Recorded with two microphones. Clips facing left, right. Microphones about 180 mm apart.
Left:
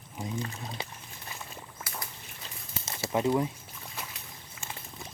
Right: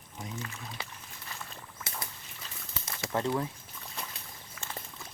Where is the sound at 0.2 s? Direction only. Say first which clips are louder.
Left 5 dB; 25° left (ahead or behind).